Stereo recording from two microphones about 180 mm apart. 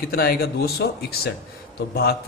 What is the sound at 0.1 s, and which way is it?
A man's voice, 55° left (ahead or behind).